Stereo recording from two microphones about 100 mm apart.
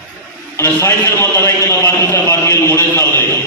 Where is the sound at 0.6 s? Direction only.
25° left (ahead or behind).